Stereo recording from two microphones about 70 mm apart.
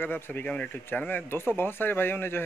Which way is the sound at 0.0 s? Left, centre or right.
Left.